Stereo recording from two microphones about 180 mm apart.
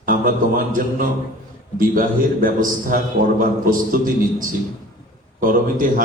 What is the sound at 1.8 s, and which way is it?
A man's voice, 50° right (ahead or behind).